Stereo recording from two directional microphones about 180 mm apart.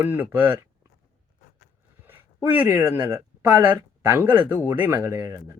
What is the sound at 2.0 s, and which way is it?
Speech, 10° right (ahead or behind).